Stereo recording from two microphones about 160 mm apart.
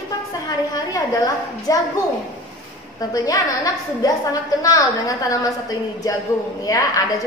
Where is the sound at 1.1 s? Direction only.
20° left (ahead or behind).